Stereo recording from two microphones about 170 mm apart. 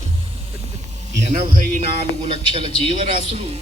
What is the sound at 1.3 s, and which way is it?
Speech, 45° right (ahead or behind).